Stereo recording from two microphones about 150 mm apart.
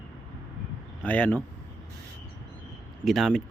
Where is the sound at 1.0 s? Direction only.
10° left (ahead or behind).